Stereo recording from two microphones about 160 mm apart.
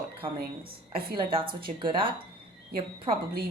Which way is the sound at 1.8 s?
30° right (ahead or behind).